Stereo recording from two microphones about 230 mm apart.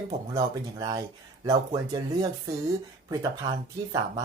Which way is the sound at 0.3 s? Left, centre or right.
Centre.